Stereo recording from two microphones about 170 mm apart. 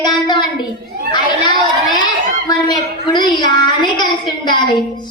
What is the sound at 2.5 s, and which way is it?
A woman's voice, 20° left (ahead or behind).